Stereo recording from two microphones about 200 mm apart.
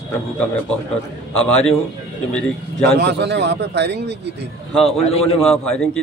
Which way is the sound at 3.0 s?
60° right (ahead or behind).